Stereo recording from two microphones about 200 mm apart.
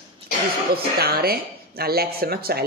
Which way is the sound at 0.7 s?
50° right (ahead or behind).